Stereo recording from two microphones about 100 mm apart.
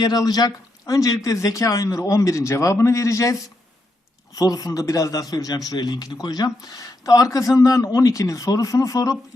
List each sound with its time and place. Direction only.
0.0 s a man's voice: 40° left (ahead or behind)
4.4 s a man's voice: 35° left (ahead or behind)